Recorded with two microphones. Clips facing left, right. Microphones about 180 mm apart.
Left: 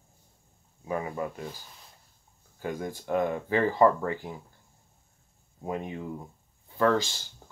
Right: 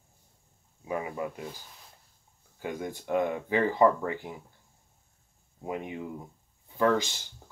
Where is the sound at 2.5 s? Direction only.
20° right (ahead or behind).